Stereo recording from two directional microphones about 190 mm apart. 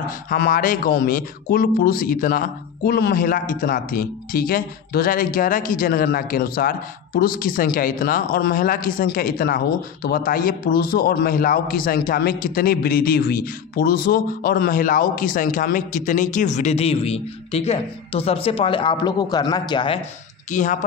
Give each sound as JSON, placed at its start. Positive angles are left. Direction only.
{"t": 0.3, "sound": "a man's voice", "side_deg": 45}
{"t": 20.4, "sound": "speech", "side_deg": 40}